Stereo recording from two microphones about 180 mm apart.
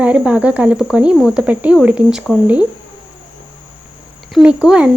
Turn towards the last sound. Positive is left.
turn(degrees=-5)  # may be behind; listen again after turning